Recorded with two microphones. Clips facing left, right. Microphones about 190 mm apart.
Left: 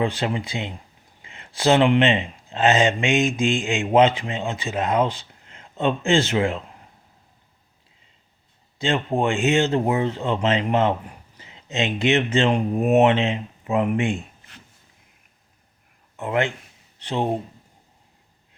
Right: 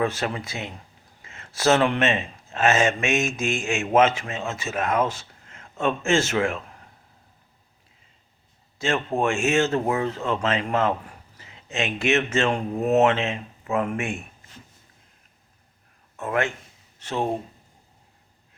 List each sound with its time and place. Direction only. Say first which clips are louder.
0.0 s speech: left 2 dB; 15° left (ahead or behind)
8.8 s speech: left 2 dB; 15° left (ahead or behind)
16.1 s speech: left 2 dB; 20° left (ahead or behind)